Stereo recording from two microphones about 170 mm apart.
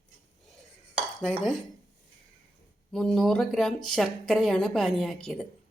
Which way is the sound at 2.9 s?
5° left (ahead or behind).